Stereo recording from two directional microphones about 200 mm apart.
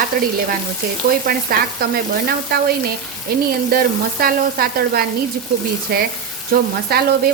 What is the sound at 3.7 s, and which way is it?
Stir, 50° right (ahead or behind).